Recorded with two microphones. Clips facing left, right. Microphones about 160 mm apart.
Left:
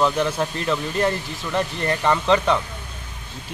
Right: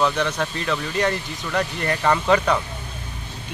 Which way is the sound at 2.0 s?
Centre (ahead or behind).